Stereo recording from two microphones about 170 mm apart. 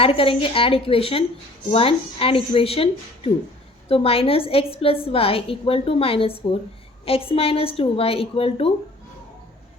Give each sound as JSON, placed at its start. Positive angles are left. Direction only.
{"t": 0.0, "sound": "a woman's voice", "side_deg": 35}